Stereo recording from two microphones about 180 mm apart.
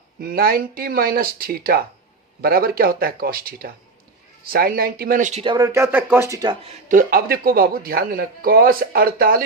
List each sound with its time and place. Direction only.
0.2 s speech: 55° right (ahead or behind); by 5.5 s 35° right (ahead or behind)
5.5 s speech: 15° right (ahead or behind)
6.8 s speech: 50° right (ahead or behind)